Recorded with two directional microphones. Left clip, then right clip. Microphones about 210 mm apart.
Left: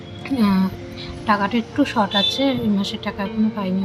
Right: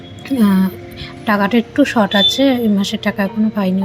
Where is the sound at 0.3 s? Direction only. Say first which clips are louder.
Right 5 dB; 20° right (ahead or behind).